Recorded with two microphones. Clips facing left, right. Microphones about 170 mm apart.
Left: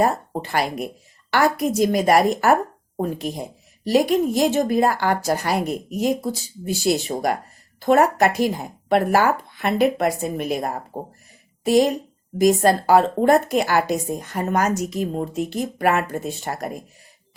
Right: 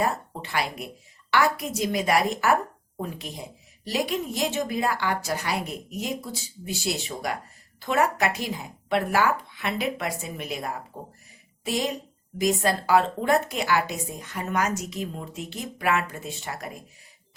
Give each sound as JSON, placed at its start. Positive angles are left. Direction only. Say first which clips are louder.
{"t": 0.0, "sound": "a woman's voice", "louder": "left 6 dB", "side_deg": 45}